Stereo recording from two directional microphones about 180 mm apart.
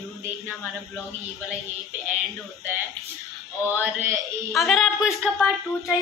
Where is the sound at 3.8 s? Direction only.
10° right (ahead or behind).